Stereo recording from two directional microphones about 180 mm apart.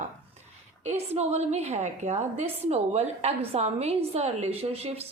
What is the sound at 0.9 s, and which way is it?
A woman's voice, 35° right (ahead or behind).